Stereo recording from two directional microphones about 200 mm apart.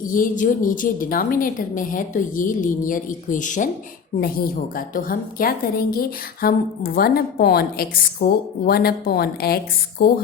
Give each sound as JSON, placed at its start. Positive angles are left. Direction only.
{"t": 0.1, "sound": "a woman's voice", "side_deg": 40}